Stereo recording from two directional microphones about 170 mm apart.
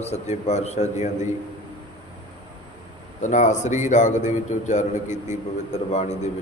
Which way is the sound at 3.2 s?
45° left (ahead or behind).